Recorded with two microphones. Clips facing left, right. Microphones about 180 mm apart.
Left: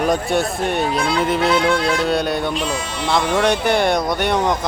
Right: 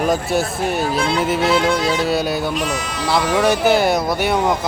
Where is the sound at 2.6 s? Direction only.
30° left (ahead or behind).